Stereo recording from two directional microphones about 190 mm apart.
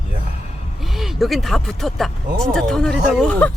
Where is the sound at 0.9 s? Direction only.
Centre (ahead or behind).